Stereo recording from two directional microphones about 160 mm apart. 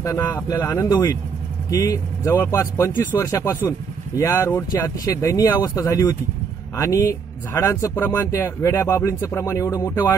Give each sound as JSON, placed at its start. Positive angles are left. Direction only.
{"t": 0.0, "sound": "speech", "side_deg": 20}